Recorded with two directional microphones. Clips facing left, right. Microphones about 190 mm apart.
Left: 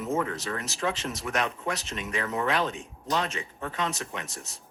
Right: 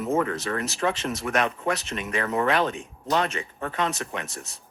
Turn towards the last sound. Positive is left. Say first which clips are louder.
# right 4 dB
turn(degrees=-60)  # may be behind; listen again after turning